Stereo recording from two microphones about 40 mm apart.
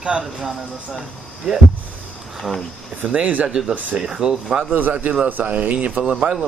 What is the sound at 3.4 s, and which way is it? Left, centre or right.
Speech, centre.